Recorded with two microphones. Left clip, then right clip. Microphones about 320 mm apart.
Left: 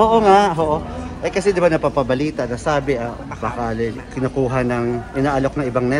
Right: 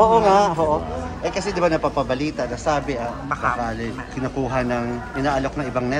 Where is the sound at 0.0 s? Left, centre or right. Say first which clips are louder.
Left 1 dB; left.